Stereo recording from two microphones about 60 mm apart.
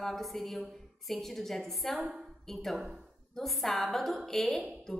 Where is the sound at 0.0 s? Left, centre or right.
Centre.